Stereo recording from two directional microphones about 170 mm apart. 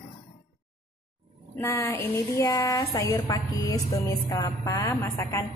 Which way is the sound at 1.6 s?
15° left (ahead or behind).